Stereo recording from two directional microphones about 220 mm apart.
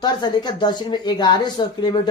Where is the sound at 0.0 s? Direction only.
20° left (ahead or behind).